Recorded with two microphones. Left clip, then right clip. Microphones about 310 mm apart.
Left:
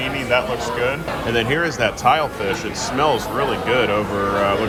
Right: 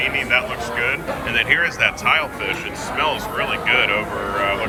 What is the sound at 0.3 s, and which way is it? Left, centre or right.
Speech, centre.